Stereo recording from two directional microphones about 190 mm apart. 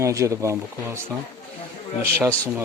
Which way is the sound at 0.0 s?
15° right (ahead or behind).